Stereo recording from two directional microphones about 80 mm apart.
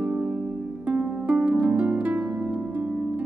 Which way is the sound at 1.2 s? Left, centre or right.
Centre.